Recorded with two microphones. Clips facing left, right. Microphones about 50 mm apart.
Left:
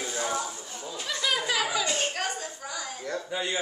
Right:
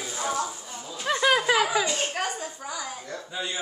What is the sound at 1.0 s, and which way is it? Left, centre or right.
Chuckle, right.